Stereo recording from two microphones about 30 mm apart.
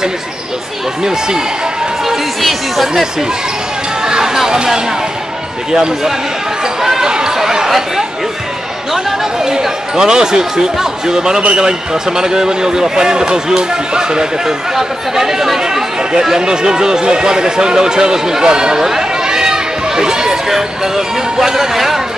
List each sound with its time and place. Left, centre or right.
2.0 s speech: centre
4.0 s a sound: right
6.8 s a sound: centre
7.1 s chatter: right
7.3 s chatter: centre
9.4 s speech: right
14.8 s speech: centre
18.8 s chatter: centre
20.4 s speech: centre